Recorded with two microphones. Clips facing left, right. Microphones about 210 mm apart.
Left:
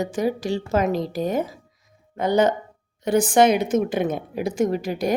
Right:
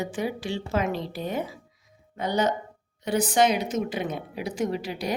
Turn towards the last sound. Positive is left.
turn(degrees=45)  # may be behind; listen again after turning